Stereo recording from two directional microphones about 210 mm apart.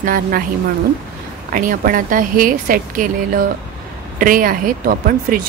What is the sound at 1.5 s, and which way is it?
Speech, 40° right (ahead or behind).